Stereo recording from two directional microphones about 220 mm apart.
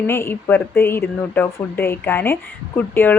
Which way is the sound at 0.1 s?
10° left (ahead or behind).